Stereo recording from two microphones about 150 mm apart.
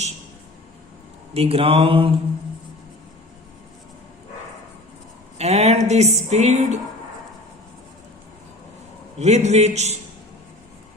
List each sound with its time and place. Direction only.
1.3 s mantra: 40° right (ahead or behind)
5.4 s speech: 45° right (ahead or behind)
9.1 s speech: 50° right (ahead or behind)